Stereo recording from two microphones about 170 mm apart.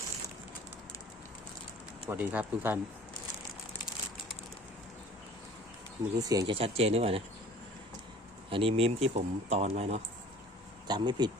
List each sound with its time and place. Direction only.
2.0 s speech: 10° right (ahead or behind)
6.1 s speech: 20° right (ahead or behind)
6.5 s speech: 35° right (ahead or behind)
8.4 s speech: 30° right (ahead or behind)
10.8 s speech: 25° right (ahead or behind)